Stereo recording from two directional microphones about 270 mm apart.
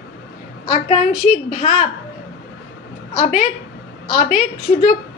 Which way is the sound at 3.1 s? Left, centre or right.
Left.